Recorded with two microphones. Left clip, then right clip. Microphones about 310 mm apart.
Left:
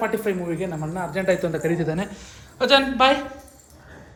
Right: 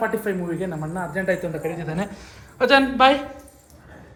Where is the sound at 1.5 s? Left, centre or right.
Left.